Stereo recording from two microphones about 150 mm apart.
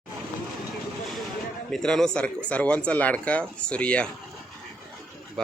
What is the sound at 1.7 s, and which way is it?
Speech, 5° left (ahead or behind).